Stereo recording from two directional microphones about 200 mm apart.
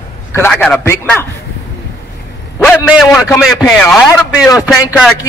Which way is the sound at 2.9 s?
Centre (ahead or behind).